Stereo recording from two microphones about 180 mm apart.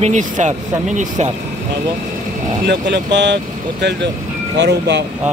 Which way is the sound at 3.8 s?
70° right (ahead or behind).